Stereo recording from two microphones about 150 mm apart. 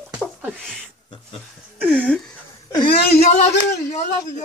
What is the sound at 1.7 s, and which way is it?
Speech, 10° right (ahead or behind).